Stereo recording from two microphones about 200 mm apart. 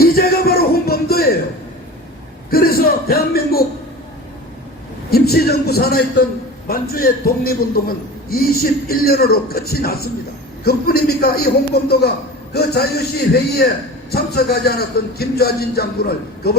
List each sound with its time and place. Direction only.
0.0 s music: 50° left (ahead or behind)
2.5 s a sound: 50° left (ahead or behind)
5.1 s a man's voice: 50° left (ahead or behind)